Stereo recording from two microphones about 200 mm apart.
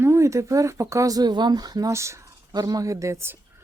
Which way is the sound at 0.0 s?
15° right (ahead or behind).